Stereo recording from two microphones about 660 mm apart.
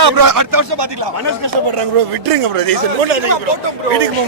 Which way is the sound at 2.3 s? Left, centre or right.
Right.